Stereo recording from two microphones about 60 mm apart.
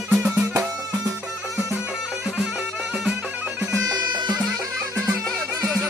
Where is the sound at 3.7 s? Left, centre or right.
Right.